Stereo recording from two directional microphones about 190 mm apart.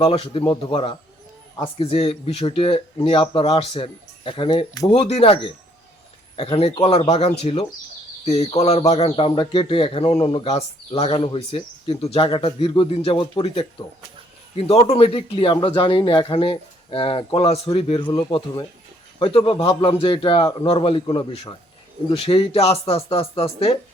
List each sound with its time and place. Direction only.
0.0 s speech: 30° left (ahead or behind)
1.8 s speech: 30° left (ahead or behind)
4.9 s speech: 35° left (ahead or behind)